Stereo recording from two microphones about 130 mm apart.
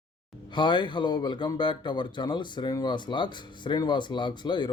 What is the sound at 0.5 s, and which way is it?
Speech, 40° left (ahead or behind).